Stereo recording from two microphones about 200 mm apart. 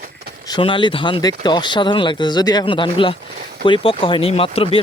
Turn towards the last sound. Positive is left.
turn(degrees=25)  # may be behind; listen again after turning